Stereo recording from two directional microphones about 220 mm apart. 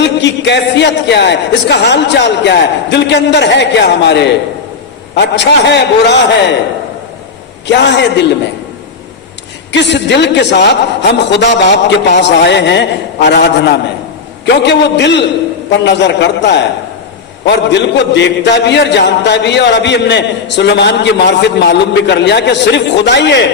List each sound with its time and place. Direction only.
0.0 s speech: 50° left (ahead or behind)
7.7 s speech: 50° left (ahead or behind)
9.7 s speech: 50° left (ahead or behind)